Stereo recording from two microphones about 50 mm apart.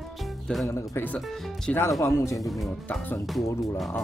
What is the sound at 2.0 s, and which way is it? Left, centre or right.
Speech, left.